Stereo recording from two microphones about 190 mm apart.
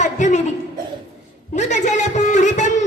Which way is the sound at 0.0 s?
40° left (ahead or behind).